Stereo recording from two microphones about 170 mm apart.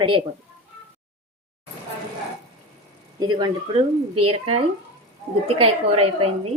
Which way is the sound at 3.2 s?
25° right (ahead or behind).